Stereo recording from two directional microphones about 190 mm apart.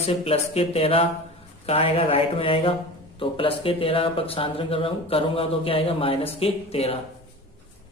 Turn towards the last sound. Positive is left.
turn(degrees=30)  # may be behind; listen again after turning